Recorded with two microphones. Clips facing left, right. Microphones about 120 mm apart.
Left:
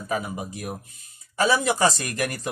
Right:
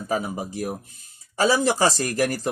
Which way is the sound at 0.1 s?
30° right (ahead or behind).